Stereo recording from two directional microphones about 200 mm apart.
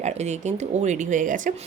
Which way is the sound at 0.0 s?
35° right (ahead or behind).